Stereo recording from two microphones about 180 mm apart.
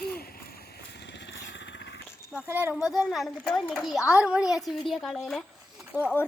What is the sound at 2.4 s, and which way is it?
Speech, 10° right (ahead or behind).